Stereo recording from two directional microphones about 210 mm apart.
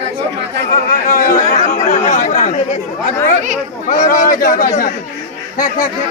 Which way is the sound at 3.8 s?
40° left (ahead or behind).